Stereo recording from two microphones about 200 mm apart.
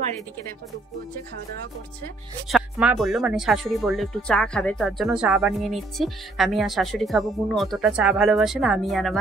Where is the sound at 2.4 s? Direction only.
Centre (ahead or behind).